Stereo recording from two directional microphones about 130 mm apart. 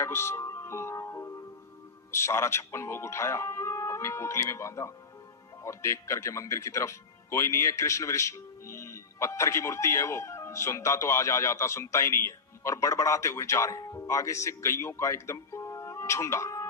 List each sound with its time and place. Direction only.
0.0 s music: 20° left (ahead or behind)
2.1 s speech: 20° left (ahead or behind)